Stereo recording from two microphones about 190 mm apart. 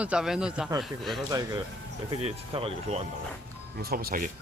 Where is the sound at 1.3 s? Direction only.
20° right (ahead or behind).